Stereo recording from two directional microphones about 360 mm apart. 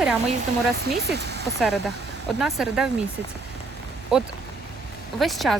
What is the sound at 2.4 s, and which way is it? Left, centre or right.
Speech, centre.